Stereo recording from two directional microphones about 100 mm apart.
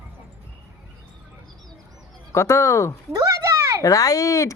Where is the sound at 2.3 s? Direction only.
30° left (ahead or behind).